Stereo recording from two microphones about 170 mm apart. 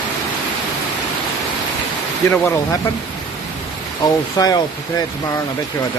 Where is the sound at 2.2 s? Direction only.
15° left (ahead or behind).